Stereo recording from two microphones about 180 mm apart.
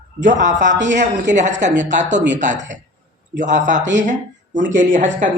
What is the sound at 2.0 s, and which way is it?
Speech, 80° right.